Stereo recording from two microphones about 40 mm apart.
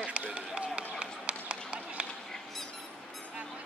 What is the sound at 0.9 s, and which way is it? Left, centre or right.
Run, right.